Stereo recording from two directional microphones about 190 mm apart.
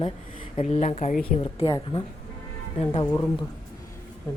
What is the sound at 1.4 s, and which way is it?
Speech, 25° left (ahead or behind).